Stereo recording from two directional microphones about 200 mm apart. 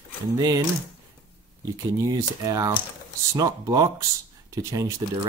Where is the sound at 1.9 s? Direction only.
15° right (ahead or behind).